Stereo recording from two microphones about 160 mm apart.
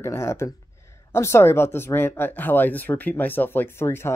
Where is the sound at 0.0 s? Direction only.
15° left (ahead or behind).